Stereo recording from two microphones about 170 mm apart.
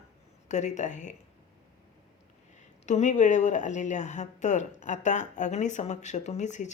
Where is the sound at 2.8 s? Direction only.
45° left (ahead or behind).